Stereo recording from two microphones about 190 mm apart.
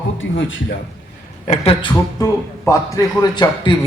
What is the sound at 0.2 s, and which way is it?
Speech, 80° left.